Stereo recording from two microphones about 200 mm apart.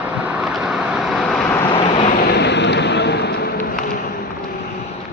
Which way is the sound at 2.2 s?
60° left (ahead or behind).